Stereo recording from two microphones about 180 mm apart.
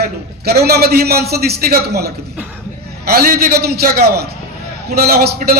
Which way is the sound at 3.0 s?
55° right (ahead or behind).